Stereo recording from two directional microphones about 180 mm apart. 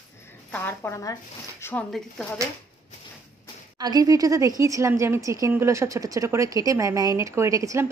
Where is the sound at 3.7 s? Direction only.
20° right (ahead or behind).